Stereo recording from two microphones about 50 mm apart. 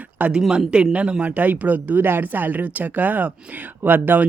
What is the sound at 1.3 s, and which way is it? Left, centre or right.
Speech, right.